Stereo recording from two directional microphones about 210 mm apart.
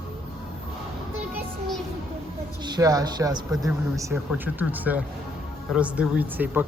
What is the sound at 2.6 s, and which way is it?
Speech, 20° right (ahead or behind).